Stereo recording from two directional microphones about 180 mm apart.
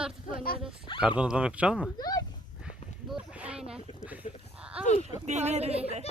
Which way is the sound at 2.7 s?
5° right (ahead or behind).